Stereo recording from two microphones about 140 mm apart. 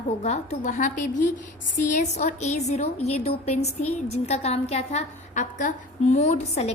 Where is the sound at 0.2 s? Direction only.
60° left (ahead or behind).